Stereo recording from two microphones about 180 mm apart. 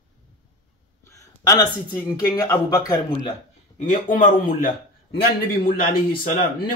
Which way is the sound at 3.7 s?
45° left (ahead or behind).